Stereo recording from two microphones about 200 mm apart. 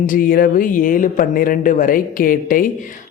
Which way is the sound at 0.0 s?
45° left (ahead or behind).